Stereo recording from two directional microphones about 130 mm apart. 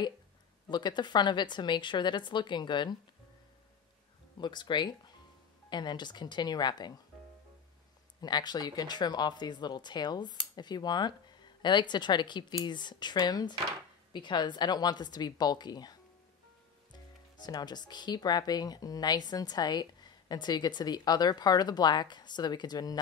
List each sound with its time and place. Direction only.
0.7 s speech: 35° left (ahead or behind)
4.4 s speech: 35° left (ahead or behind)
8.2 s speech: 35° left (ahead or behind)